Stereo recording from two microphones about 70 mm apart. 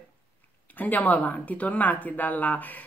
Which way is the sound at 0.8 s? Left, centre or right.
Left.